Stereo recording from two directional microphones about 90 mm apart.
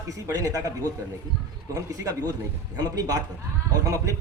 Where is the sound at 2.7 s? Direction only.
45° right (ahead or behind).